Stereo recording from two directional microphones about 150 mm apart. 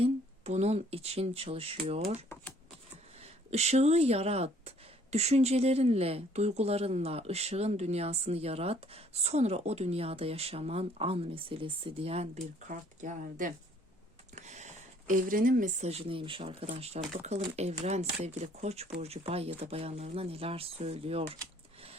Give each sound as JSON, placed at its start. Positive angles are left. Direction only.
{"t": 0.0, "sound": "speech", "side_deg": -45}
{"t": 3.5, "sound": "speech", "side_deg": -45}